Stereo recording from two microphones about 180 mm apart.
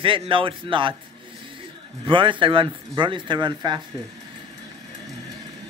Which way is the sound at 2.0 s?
25° right (ahead or behind).